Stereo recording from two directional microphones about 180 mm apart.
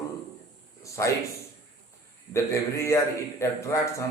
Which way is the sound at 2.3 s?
15° left (ahead or behind).